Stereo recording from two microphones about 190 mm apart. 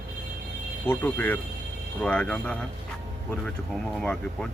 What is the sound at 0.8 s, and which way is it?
Speech, 10° left (ahead or behind).